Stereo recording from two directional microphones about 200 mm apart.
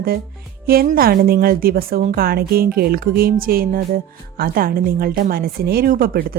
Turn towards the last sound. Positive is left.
turn(degrees=-45)  # may be behind; listen again after turning